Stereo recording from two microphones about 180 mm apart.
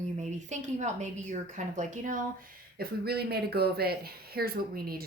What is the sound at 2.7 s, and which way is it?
Speech, 60° right (ahead or behind).